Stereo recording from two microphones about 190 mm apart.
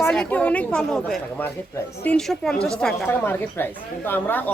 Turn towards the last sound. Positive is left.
turn(degrees=10)  # may be behind; listen again after turning